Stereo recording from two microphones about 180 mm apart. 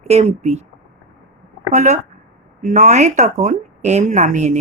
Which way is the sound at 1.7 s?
40° right (ahead or behind).